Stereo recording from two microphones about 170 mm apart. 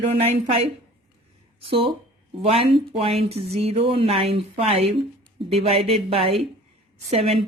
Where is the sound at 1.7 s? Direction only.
35° right (ahead or behind).